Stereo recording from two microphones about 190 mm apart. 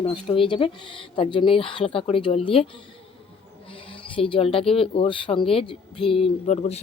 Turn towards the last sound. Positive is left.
turn(degrees=40)  # may be behind; listen again after turning